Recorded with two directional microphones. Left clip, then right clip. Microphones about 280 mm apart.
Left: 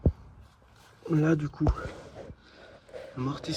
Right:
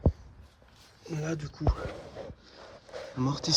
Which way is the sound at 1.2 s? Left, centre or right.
Centre.